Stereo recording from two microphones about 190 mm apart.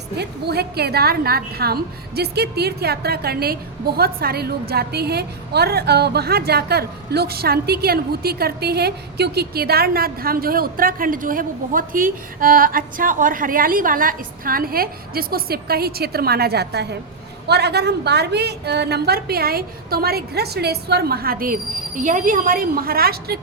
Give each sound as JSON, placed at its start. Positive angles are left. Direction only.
{"t": 0.2, "sound": "a woman's voice", "side_deg": -60}